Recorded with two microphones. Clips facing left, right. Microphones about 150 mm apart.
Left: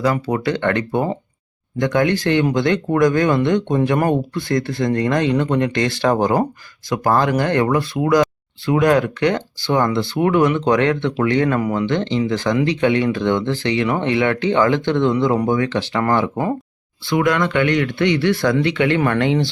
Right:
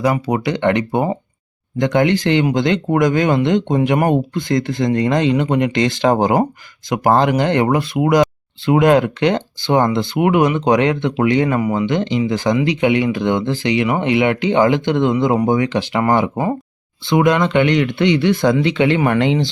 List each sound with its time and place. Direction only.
0.0 s speech: 15° right (ahead or behind)